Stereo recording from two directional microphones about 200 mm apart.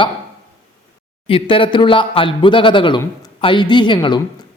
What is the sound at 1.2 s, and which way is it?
A woman's voice, 25° left (ahead or behind).